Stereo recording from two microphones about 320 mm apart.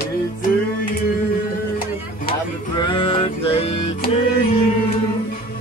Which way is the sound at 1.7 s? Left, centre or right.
Left.